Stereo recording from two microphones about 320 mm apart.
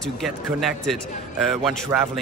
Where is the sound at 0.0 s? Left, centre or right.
Centre.